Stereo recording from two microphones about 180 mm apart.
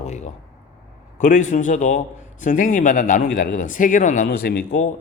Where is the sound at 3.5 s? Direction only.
45° left (ahead or behind).